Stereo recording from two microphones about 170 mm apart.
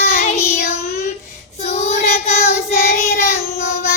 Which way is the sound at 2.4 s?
60° left (ahead or behind).